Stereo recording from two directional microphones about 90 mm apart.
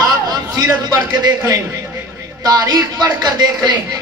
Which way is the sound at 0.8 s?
45° right (ahead or behind).